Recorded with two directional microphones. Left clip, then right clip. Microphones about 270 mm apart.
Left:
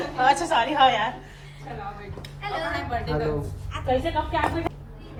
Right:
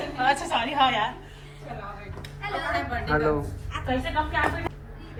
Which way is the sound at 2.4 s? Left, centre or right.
Centre.